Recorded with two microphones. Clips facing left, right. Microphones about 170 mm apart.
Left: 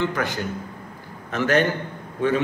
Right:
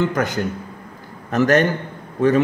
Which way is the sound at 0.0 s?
45° right (ahead or behind).